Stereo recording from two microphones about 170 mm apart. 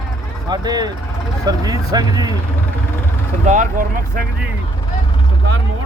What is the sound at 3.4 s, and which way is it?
Speech, 45° right (ahead or behind).